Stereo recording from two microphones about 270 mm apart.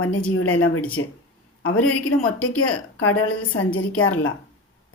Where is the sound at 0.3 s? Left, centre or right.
Left.